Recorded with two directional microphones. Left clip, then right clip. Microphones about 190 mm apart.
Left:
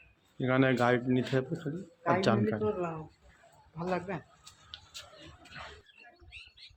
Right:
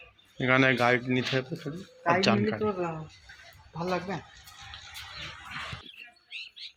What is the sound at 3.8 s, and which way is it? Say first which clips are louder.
Speech: right 3 dB; 45° right (ahead or behind).